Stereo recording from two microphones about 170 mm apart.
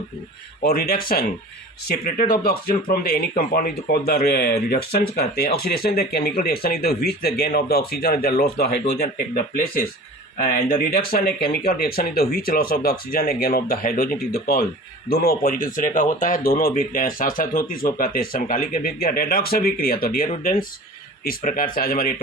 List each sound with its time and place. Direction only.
0.6 s speech: 60° left (ahead or behind)